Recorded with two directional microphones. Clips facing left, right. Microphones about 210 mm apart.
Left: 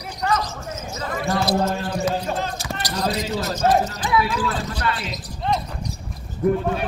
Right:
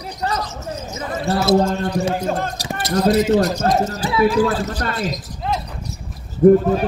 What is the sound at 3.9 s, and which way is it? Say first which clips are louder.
A man's voice: right 5 dB; 40° right (ahead or behind).